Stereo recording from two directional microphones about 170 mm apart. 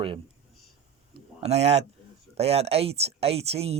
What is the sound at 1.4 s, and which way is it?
Speech, 40° right (ahead or behind).